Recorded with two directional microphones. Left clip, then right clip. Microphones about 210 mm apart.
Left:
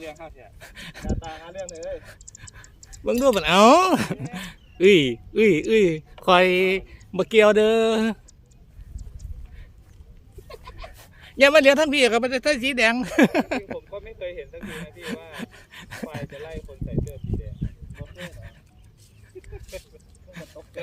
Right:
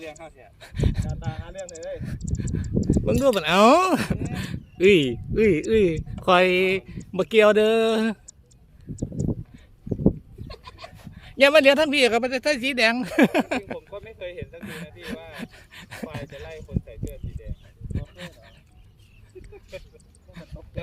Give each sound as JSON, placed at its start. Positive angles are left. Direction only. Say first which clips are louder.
{"t": 0.0, "sound": "speech", "louder": "left 1 dB", "side_deg": -20}
{"t": 0.6, "sound": "speech", "louder": "right 6 dB", "side_deg": 0}
{"t": 10.5, "sound": "a sound", "louder": "left 1 dB", "side_deg": -40}
{"t": 11.0, "sound": "speech", "louder": "left 1 dB", "side_deg": 0}
{"t": 13.7, "sound": "a sound", "louder": "left 2 dB", "side_deg": -50}
{"t": 14.6, "sound": "speech", "louder": "left 1 dB", "side_deg": 0}
{"t": 15.3, "sound": "a sound", "louder": "left 1 dB", "side_deg": 0}
{"t": 16.1, "sound": "speech", "louder": "left 2 dB", "side_deg": 0}
{"t": 17.9, "sound": "dog", "louder": "right 5 dB", "side_deg": 0}